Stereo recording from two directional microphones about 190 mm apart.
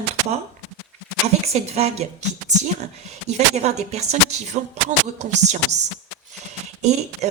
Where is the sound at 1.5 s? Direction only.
35° right (ahead or behind).